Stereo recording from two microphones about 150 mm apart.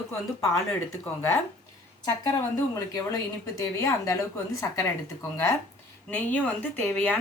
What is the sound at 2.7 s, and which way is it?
A woman's voice, 25° left (ahead or behind).